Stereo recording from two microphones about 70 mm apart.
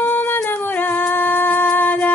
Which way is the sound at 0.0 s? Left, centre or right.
Left.